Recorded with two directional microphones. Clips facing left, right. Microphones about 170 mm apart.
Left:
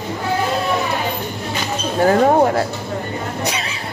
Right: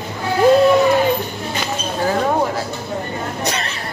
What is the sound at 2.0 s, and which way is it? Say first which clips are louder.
Speech: left 5 dB; 50° left (ahead or behind).